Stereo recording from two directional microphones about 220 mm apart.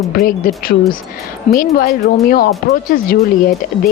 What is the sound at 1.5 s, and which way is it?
A woman's voice, 40° left (ahead or behind).